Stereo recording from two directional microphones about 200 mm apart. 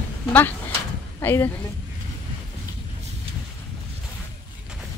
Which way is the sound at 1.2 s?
10° left (ahead or behind).